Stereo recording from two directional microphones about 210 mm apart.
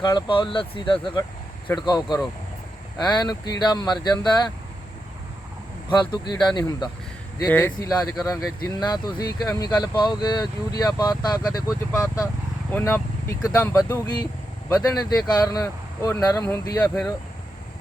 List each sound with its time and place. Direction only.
0.0 s speech: 20° left (ahead or behind)
5.9 s speech: 20° left (ahead or behind)
13.8 s speech: 20° left (ahead or behind)